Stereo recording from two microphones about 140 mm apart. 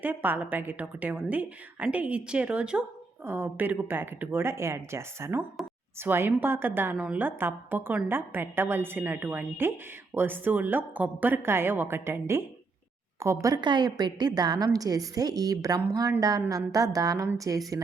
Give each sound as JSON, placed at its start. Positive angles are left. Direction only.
{"t": 0.0, "sound": "a woman's voice", "side_deg": -10}